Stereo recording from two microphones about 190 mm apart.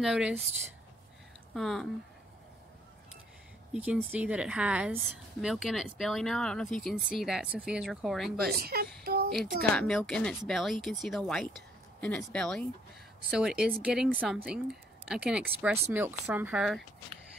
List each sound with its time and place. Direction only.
0.0 s a woman's voice: 5° right (ahead or behind)
1.5 s speech: centre (ahead or behind)
3.7 s a woman's voice: 5° right (ahead or behind)
8.5 s speech: 55° right (ahead or behind)
9.0 s a sound: 55° right (ahead or behind)
9.6 s a woman's voice: 5° left (ahead or behind)